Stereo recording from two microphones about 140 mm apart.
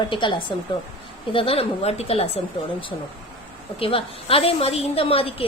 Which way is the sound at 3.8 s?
40° left (ahead or behind).